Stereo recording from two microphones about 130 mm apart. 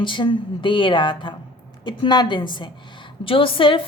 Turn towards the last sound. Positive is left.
turn(degrees=40)  # may be behind; listen again after turning